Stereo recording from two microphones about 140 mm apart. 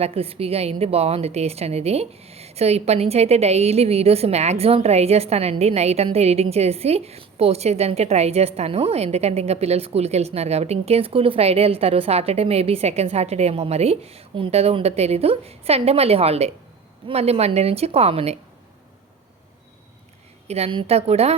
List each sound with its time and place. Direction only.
0.0 s a woman's voice: 45° right (ahead or behind)
20.5 s a woman's voice: 45° right (ahead or behind)